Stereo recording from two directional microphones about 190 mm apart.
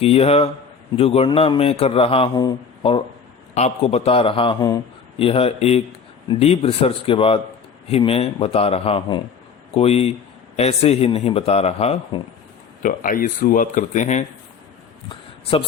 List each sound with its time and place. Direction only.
0.0 s a man's voice: 30° left (ahead or behind)
12.8 s speech: 45° left (ahead or behind)